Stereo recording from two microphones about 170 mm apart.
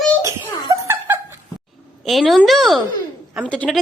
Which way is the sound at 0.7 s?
15° right (ahead or behind).